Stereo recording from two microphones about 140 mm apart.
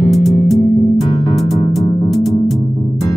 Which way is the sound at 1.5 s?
Centre (ahead or behind).